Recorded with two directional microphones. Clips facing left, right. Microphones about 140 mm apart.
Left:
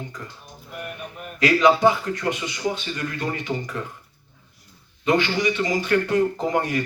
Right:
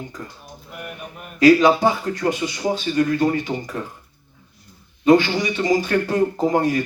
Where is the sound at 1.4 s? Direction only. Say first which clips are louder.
Right 4 dB; 35° right (ahead or behind).